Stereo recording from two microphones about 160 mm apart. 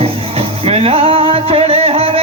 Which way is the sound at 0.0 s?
40° right (ahead or behind).